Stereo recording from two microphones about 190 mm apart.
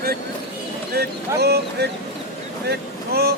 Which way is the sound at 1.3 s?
60° right (ahead or behind).